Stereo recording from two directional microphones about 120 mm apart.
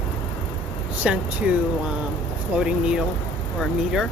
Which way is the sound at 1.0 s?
10° right (ahead or behind).